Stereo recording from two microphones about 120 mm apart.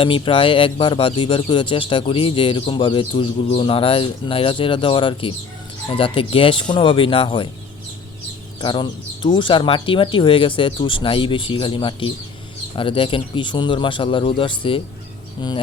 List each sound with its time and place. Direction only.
0.0 s speech: 45° left (ahead or behind)
8.6 s speech: 45° left (ahead or behind)